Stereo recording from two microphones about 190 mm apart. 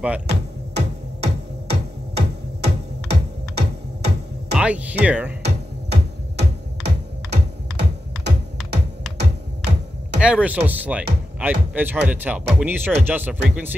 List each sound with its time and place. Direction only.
0.3 s music: 60° right (ahead or behind)
4.6 s speech: 5° right (ahead or behind)
5.4 s music: 60° right (ahead or behind)
9.2 s a sound: 65° right (ahead or behind)
10.2 s speech: 5° right (ahead or behind)